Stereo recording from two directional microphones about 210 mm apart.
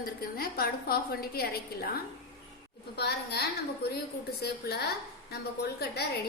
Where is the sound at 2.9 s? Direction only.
50° left (ahead or behind).